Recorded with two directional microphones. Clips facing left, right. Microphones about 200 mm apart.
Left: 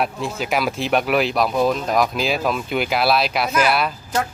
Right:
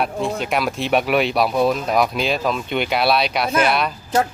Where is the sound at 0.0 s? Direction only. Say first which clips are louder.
Right 2 dB; centre (ahead or behind).